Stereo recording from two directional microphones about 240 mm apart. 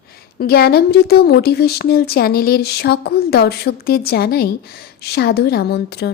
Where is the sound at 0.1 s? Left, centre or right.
Left.